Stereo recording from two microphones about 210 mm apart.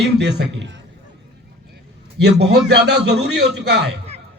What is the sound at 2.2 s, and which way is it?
Speech, 55° right (ahead or behind).